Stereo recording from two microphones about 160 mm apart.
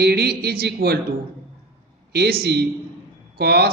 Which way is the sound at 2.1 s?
85° right.